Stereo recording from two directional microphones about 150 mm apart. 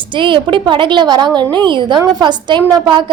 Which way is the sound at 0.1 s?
35° right (ahead or behind).